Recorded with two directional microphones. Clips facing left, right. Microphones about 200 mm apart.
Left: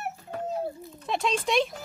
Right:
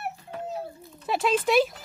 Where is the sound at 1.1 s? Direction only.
5° right (ahead or behind).